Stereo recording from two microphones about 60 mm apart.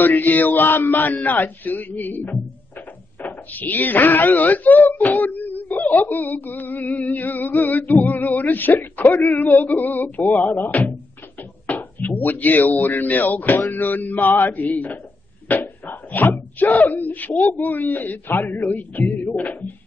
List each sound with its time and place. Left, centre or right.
0.0 s speech: left